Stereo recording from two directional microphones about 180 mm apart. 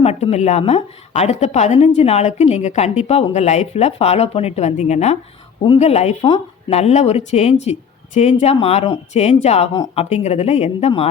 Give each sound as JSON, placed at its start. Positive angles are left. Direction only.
{"t": 0.0, "sound": "speech", "side_deg": 35}